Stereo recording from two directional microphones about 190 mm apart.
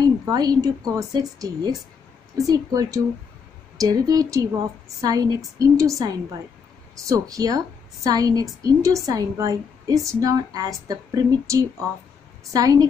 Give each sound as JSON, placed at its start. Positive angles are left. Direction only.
{"t": 0.0, "sound": "a woman's voice", "side_deg": -20}